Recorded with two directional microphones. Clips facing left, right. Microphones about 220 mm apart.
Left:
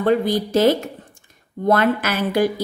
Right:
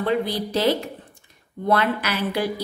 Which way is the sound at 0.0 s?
45° left (ahead or behind).